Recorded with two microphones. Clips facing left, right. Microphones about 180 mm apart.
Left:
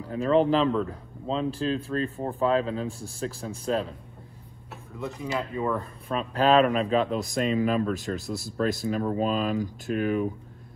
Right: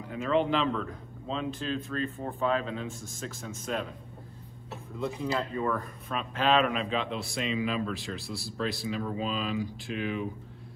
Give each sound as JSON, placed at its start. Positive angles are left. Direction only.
{"t": 0.0, "sound": "speech", "side_deg": 35}
{"t": 5.2, "sound": "speech", "side_deg": 15}
{"t": 5.8, "sound": "speech", "side_deg": 35}